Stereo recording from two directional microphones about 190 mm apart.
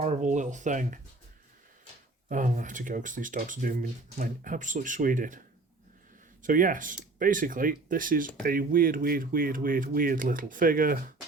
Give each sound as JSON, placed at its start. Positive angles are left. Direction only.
{"t": 0.0, "sound": "speech", "side_deg": -40}
{"t": 2.3, "sound": "speech", "side_deg": -45}
{"t": 6.4, "sound": "speech", "side_deg": -45}